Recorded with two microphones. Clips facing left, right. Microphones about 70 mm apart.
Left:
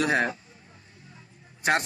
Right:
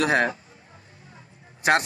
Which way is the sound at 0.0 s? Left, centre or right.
Right.